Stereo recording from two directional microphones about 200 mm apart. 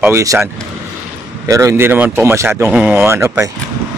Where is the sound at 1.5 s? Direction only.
15° right (ahead or behind).